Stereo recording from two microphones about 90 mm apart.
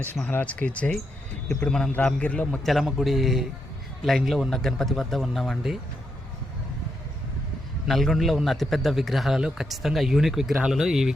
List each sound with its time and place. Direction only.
0.0 s a man's voice: 20° left (ahead or behind)
2.6 s a man's voice: centre (ahead or behind)
7.9 s a man's voice: centre (ahead or behind)